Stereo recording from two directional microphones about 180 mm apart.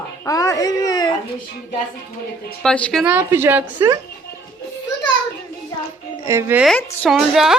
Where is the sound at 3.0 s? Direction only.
10° right (ahead or behind).